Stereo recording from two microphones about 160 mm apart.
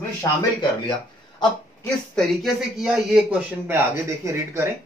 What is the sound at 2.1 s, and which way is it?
Speech, centre (ahead or behind).